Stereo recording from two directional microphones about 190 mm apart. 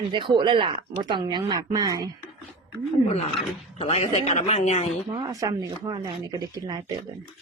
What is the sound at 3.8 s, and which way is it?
Speech, 30° left (ahead or behind).